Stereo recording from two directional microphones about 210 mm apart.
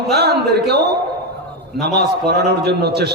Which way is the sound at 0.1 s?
50° right (ahead or behind).